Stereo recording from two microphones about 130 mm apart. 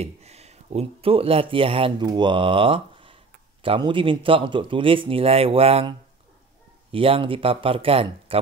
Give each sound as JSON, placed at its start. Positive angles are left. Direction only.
{"t": 0.0, "sound": "speech", "side_deg": -55}